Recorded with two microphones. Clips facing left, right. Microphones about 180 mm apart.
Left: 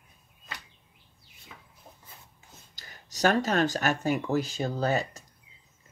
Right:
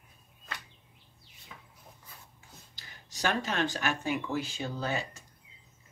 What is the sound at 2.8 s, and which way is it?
Speech, 40° left (ahead or behind).